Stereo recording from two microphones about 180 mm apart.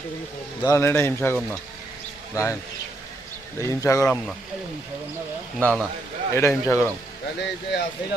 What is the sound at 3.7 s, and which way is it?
Speech, 15° left (ahead or behind).